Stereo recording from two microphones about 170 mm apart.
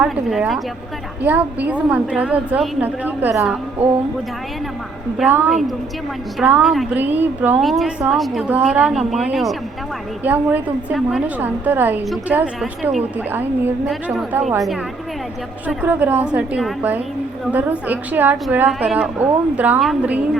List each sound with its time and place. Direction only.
0.0 s a woman's voice: 5° right (ahead or behind)
5.1 s a woman's voice: 5° right (ahead or behind)
7.6 s a woman's voice: centre (ahead or behind)
15.6 s a woman's voice: 10° right (ahead or behind)